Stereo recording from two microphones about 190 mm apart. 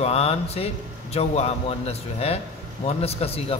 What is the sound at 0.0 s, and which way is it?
A man's voice, 30° left (ahead or behind).